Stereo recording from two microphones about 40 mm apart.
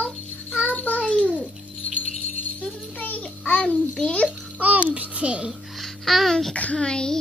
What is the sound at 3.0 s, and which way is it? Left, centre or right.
Child singing, left.